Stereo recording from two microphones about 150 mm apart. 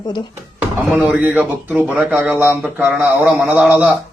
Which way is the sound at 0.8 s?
10° right (ahead or behind).